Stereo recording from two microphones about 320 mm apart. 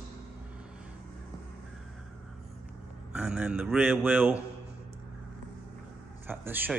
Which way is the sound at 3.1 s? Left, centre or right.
Centre.